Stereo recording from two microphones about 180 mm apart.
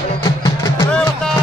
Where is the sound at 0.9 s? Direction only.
5° left (ahead or behind).